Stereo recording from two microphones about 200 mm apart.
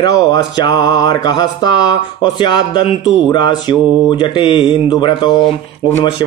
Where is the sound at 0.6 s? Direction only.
20° left (ahead or behind).